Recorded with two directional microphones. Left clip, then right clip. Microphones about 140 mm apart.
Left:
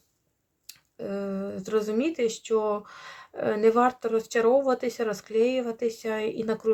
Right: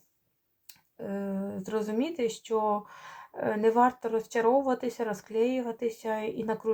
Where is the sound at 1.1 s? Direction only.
40° left (ahead or behind).